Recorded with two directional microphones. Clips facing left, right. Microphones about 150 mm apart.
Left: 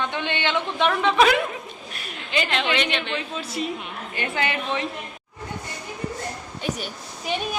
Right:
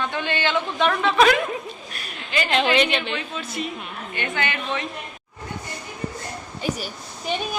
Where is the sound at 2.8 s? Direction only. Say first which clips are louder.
Right 2 dB; 30° left (ahead or behind).